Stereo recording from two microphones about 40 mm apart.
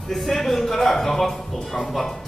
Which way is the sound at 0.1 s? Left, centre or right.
Centre.